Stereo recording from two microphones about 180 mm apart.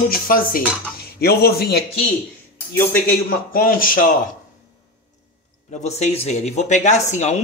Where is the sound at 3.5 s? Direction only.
50° left (ahead or behind).